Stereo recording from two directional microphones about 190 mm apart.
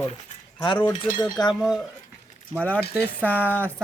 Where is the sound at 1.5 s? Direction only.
Centre (ahead or behind).